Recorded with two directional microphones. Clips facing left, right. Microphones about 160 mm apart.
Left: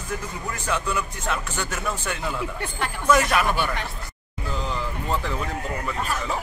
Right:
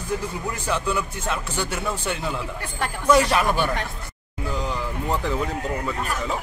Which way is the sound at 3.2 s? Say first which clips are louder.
Right 2 dB; 30° right (ahead or behind).